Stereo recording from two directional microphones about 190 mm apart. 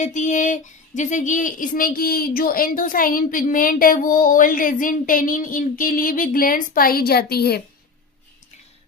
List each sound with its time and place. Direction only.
0.0 s speech: 40° left (ahead or behind); by 7.6 s 55° left (ahead or behind)